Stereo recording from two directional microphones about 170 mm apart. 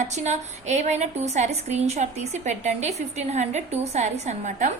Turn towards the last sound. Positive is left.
turn(degrees=-45)  # may be behind; listen again after turning